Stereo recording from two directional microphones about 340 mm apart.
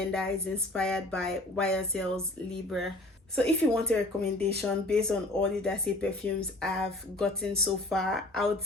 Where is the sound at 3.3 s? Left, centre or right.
Centre.